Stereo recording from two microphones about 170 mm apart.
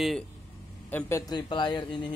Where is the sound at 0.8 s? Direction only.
15° left (ahead or behind).